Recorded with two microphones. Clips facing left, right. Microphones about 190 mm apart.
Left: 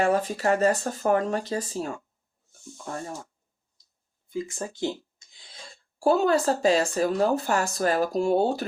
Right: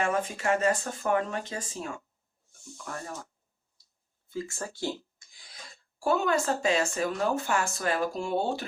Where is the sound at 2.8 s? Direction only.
25° left (ahead or behind).